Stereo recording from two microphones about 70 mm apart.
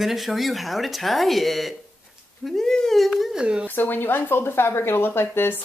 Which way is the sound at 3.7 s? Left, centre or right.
Left.